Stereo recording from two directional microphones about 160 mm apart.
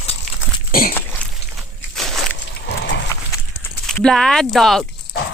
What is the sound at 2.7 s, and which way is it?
Horse, 90° left.